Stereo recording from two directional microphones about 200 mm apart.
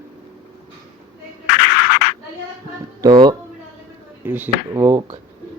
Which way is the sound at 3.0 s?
20° right (ahead or behind).